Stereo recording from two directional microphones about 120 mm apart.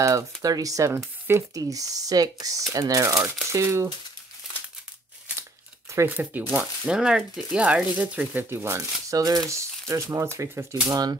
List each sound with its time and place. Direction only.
0.0 s speech: 30° right (ahead or behind)
5.9 s speech: 20° right (ahead or behind)